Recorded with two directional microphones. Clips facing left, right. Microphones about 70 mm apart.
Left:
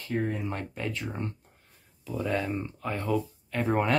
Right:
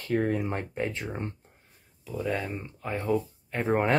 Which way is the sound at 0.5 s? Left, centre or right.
Right.